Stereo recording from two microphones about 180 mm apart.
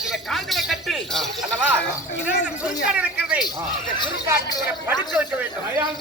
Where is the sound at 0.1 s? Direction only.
Centre (ahead or behind).